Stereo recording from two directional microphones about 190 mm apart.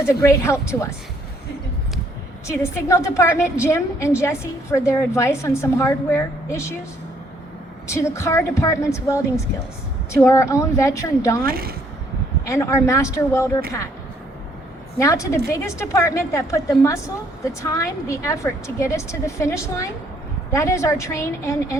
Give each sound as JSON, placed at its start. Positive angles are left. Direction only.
{"t": 0.0, "sound": "a woman's voice", "side_deg": 15}
{"t": 2.5, "sound": "a woman's voice", "side_deg": 15}
{"t": 7.9, "sound": "a woman's voice", "side_deg": 15}
{"t": 11.4, "sound": "speech", "side_deg": -50}
{"t": 12.5, "sound": "a woman's voice", "side_deg": 15}
{"t": 14.9, "sound": "a woman's voice", "side_deg": 15}